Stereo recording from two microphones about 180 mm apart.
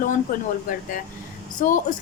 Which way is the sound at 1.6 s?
45° left (ahead or behind).